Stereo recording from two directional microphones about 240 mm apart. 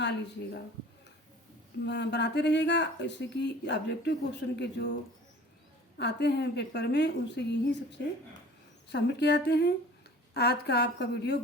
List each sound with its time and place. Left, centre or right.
1.9 s speech: left
6.0 s speech: left